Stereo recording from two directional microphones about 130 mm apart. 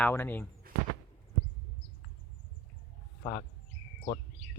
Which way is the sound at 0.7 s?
90° right.